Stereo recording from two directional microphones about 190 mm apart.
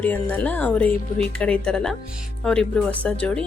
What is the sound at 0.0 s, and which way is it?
Speech, 10° left (ahead or behind).